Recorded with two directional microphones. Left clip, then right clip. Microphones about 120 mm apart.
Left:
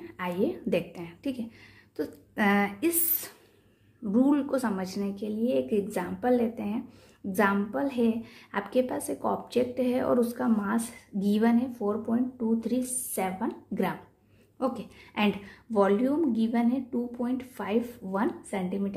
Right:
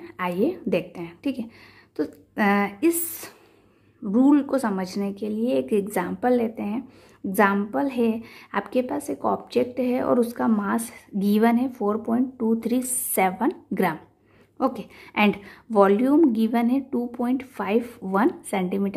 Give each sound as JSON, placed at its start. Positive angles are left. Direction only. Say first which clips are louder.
{"t": 0.0, "sound": "a woman's voice", "louder": "right 5 dB", "side_deg": -25}
{"t": 14.6, "sound": "a woman's voice", "louder": "right 6 dB", "side_deg": -30}